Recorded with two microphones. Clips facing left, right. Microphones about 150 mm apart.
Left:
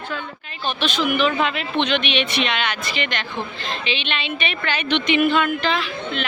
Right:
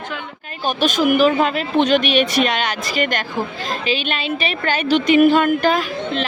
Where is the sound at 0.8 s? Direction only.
45° right (ahead or behind).